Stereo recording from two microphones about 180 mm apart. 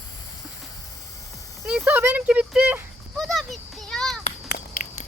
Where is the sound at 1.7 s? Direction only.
10° right (ahead or behind).